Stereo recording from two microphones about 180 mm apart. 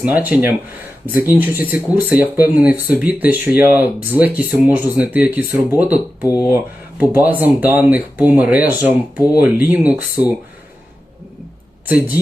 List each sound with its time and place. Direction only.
0.0 s speech: 10° right (ahead or behind)
6.2 s speech: 20° left (ahead or behind)
7.0 s speech: 10° right (ahead or behind)
11.9 s speech: 10° right (ahead or behind)